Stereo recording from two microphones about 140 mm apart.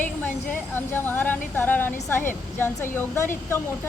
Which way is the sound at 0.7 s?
15° left (ahead or behind).